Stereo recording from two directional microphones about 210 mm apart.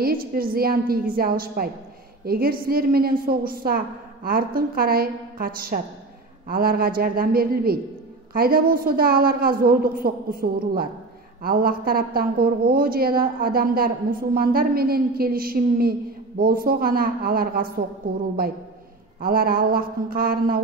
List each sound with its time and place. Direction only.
0.0 s a woman's voice: 45° right (ahead or behind)
19.2 s a woman's voice: 45° right (ahead or behind)